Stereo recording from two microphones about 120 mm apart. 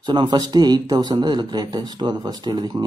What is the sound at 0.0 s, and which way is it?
Speech, 40° right (ahead or behind).